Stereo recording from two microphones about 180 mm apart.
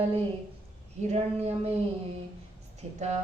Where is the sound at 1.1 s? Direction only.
35° right (ahead or behind).